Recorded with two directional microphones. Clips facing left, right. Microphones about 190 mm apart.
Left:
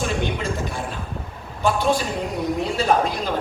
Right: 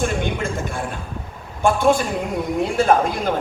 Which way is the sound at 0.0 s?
50° right (ahead or behind).